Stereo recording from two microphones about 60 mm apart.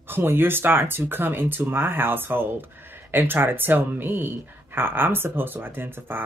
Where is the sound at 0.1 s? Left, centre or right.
Right.